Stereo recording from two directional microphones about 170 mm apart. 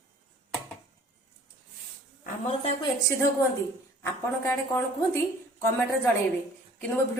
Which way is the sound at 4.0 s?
15° left (ahead or behind).